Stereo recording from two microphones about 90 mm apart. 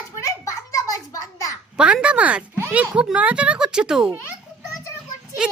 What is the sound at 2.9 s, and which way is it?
Speech, 10° right (ahead or behind).